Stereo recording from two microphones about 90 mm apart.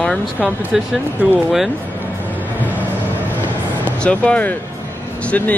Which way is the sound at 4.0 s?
15° left (ahead or behind).